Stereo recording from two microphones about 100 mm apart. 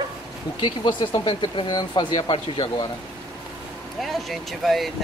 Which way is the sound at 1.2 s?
55° left (ahead or behind).